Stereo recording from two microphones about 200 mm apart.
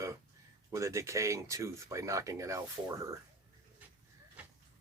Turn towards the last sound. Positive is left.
turn(degrees=-15)  # may be behind; listen again after turning